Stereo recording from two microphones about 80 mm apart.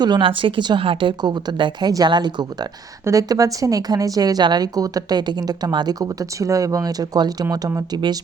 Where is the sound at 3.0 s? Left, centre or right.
Right.